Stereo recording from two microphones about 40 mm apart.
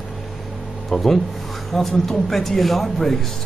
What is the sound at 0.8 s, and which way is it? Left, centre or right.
A man's voice, centre.